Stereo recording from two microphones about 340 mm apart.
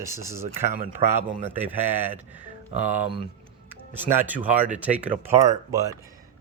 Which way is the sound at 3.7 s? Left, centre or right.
Centre.